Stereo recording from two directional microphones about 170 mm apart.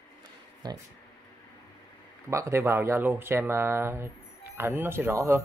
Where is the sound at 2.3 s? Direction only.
15° right (ahead or behind).